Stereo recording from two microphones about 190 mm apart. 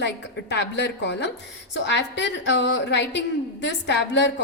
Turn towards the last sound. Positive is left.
turn(degrees=65)  # may be behind; listen again after turning